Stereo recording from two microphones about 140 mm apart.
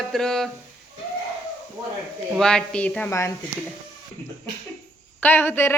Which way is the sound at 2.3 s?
5° left (ahead or behind).